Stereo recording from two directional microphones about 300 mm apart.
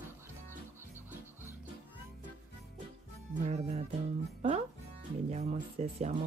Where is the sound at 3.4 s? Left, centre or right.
Right.